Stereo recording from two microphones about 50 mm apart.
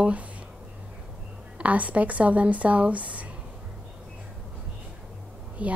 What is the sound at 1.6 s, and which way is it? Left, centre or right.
A woman's voice, right.